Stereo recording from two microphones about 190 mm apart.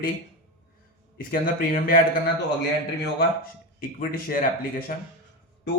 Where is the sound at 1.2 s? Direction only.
50° left (ahead or behind).